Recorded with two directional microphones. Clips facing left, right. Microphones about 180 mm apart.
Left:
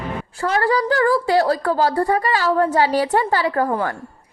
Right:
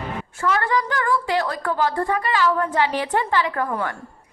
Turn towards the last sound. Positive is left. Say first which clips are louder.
# left 5 dB
turn(degrees=35)  # may be behind; listen again after turning